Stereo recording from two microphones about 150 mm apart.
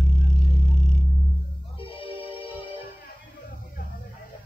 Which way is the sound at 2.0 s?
35° left (ahead or behind).